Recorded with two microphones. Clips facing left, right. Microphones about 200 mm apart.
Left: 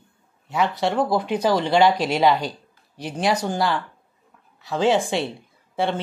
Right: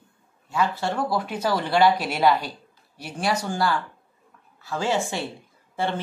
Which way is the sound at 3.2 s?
20° left (ahead or behind).